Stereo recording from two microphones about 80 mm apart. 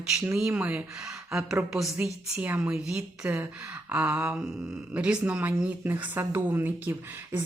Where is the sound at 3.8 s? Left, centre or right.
Right.